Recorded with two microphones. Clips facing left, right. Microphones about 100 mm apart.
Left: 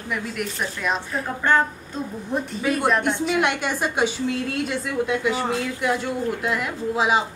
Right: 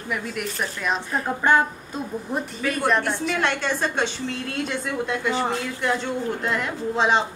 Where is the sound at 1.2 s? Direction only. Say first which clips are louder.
Right 1 dB; 15° right (ahead or behind); by 2.8 s centre (ahead or behind).